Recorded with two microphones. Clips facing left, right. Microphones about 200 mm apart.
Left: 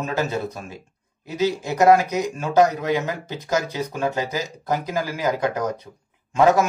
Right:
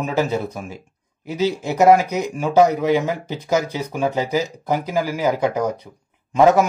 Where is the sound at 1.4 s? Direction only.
15° right (ahead or behind).